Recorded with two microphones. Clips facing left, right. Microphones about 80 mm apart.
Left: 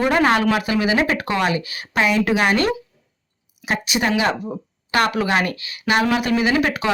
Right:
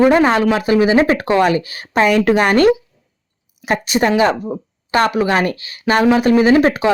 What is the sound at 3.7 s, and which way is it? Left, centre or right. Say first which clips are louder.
Speech: right 5 dB; right.